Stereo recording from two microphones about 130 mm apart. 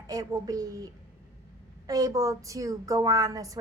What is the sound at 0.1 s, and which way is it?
Speech, 30° right (ahead or behind).